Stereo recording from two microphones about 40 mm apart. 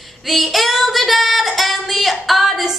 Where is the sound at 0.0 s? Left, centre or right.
Centre.